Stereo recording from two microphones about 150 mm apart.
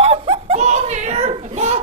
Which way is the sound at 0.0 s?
40° right (ahead or behind).